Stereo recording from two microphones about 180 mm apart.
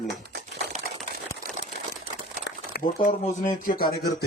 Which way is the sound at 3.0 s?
45° left (ahead or behind).